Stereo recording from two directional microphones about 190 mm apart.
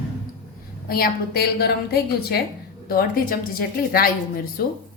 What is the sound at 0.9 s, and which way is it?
A woman's voice, 50° left (ahead or behind).